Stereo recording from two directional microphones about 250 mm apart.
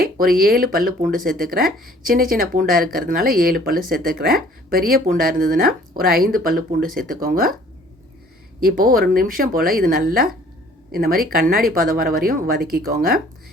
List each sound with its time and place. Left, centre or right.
0.0 s speech: right
8.6 s speech: right